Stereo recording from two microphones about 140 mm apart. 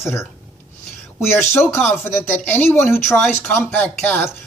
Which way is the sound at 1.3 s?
20° left (ahead or behind).